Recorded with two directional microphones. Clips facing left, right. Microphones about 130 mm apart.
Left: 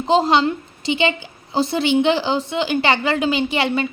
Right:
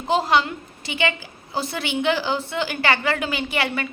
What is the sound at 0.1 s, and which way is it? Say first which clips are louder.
A woman's voice: left 4 dB; 25° left (ahead or behind).